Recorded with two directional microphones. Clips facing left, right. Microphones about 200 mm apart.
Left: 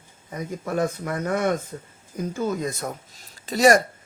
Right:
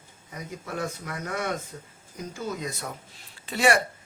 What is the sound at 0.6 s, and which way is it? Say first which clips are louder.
Speech: left 8 dB; 50° left (ahead or behind).